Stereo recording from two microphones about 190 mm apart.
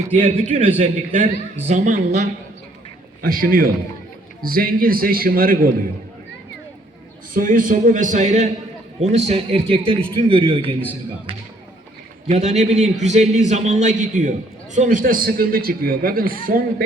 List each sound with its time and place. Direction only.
0.1 s a man's voice: 30° right (ahead or behind); by 5.7 s 50° right (ahead or behind)
7.3 s a man's voice: 45° right (ahead or behind); by 10.8 s 25° right (ahead or behind)
12.3 s a man's voice: 35° right (ahead or behind)